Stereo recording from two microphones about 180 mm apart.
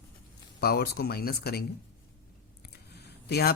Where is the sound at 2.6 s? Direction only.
65° left (ahead or behind).